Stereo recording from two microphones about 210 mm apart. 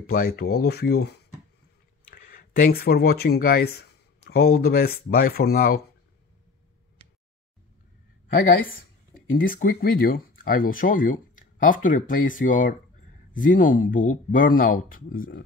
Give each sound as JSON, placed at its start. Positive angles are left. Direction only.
{"t": 0.0, "sound": "speech", "side_deg": 45}
{"t": 9.4, "sound": "speech", "side_deg": 40}